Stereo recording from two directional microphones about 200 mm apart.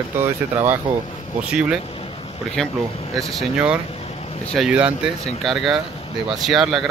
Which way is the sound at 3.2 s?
Centre (ahead or behind).